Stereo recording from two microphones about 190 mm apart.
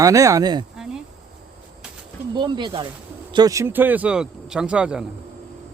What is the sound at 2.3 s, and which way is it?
Speech, 25° right (ahead or behind).